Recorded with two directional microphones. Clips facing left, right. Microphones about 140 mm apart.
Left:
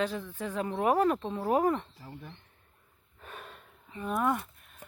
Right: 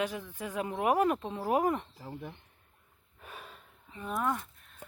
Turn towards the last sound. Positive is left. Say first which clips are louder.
# left 3 dB
turn(degrees=10)  # may be behind; listen again after turning